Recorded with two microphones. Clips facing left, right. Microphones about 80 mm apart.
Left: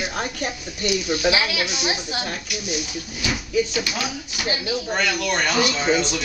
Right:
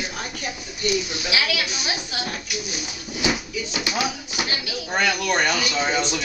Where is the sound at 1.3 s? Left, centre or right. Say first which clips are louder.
Left 2 dB; left.